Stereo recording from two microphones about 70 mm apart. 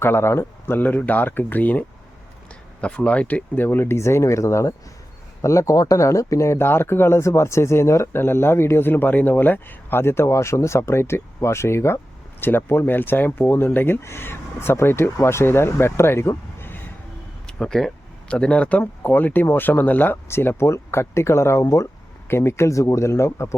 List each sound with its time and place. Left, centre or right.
0.0 s speech: left
0.8 s speech: left
2.8 s speech: centre; by 16.3 s left
16.6 s a sound: left
17.4 s speech: centre
18.8 s speech: left